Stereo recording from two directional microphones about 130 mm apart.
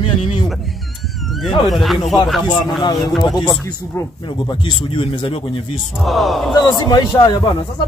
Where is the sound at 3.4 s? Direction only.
30° left (ahead or behind).